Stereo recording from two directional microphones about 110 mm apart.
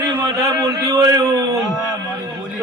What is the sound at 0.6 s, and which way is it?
Speech, 35° right (ahead or behind).